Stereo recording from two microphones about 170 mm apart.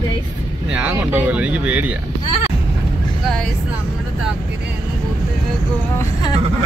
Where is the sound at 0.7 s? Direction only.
10° right (ahead or behind).